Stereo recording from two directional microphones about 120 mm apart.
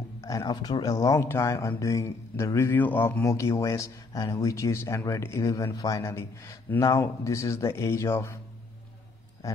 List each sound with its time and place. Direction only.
0.2 s speech: 30° left (ahead or behind)